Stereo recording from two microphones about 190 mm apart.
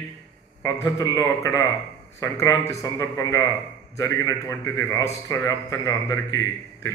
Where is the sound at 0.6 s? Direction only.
15° left (ahead or behind).